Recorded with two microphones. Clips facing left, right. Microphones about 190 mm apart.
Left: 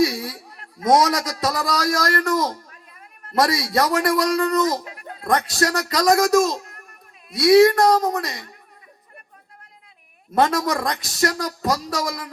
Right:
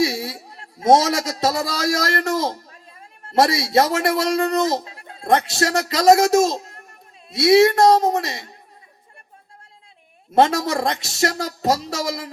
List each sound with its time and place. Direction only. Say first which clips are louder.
0.0 s a man's voice: left 1 dB; 25° right (ahead or behind)
10.3 s a man's voice: right 2 dB; 25° right (ahead or behind)